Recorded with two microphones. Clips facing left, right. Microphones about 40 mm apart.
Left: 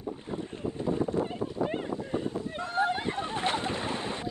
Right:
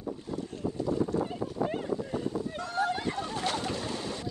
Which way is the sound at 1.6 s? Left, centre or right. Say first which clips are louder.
Right 1 dB; left.